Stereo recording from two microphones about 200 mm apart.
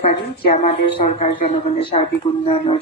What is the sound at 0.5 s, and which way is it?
A woman's voice, 30° left (ahead or behind).